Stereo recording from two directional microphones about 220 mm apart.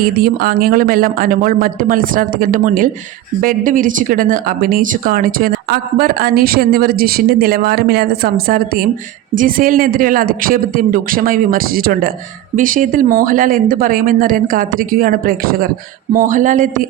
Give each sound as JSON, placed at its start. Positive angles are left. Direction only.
{"t": 0.0, "sound": "speech", "side_deg": -40}